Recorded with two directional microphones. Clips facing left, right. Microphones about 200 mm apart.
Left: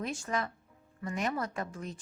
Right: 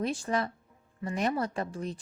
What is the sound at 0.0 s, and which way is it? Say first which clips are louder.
A woman's voice: right 4 dB; 35° right (ahead or behind).